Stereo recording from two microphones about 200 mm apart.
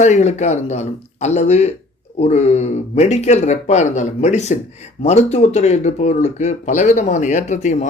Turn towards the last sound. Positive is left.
turn(degrees=35)  # may be behind; listen again after turning